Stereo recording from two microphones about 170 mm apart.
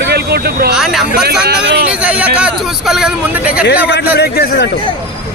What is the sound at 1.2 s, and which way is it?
Speech, 70° right (ahead or behind).